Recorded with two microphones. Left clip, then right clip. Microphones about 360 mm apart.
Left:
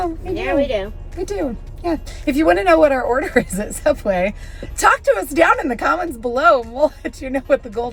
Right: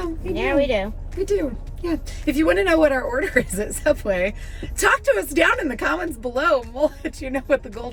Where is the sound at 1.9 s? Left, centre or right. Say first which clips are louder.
Left 4 dB; centre.